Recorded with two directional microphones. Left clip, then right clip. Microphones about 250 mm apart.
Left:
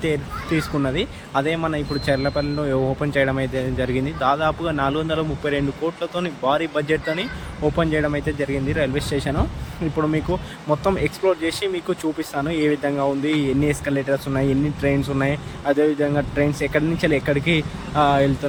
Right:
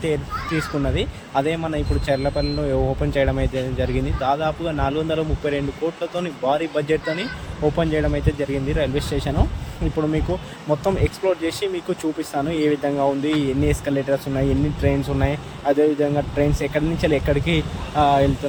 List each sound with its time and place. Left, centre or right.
0.9 s a man's voice: centre